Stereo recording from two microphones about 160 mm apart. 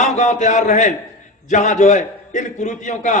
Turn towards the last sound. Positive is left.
turn(degrees=50)  # may be behind; listen again after turning